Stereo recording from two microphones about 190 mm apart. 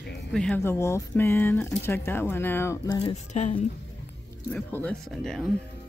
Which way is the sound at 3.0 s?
35° left (ahead or behind).